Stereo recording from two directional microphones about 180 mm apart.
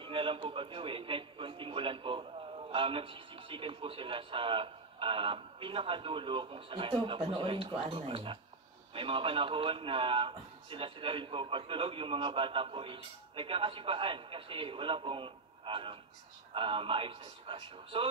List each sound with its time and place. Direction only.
0.0 s a man's voice: 30° right (ahead or behind)